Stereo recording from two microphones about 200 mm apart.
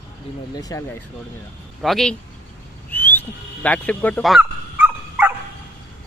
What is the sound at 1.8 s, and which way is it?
Speech, centre (ahead or behind).